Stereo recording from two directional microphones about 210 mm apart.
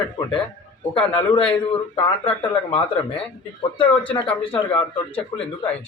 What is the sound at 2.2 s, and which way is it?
Speech, 25° left (ahead or behind).